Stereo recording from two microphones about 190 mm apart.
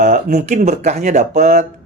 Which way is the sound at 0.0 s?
40° right (ahead or behind).